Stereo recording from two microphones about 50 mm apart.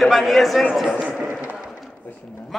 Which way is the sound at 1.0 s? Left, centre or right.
Centre.